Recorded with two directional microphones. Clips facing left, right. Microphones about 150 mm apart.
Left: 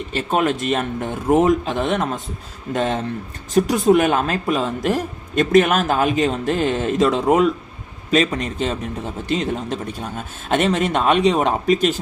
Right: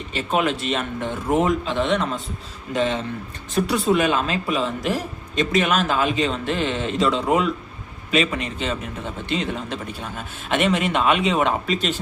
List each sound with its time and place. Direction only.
0.1 s speech: 45° left (ahead or behind)